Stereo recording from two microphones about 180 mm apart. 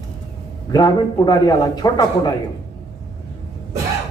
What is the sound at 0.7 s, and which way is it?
A man's voice, 20° left (ahead or behind).